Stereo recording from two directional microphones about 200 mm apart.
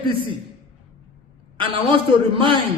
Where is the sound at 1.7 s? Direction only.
25° right (ahead or behind).